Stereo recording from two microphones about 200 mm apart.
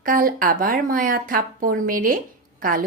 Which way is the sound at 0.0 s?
45° right (ahead or behind).